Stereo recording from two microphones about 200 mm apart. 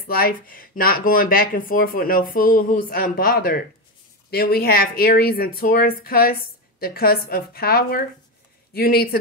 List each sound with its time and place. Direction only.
0.0 s speech: 45° left (ahead or behind)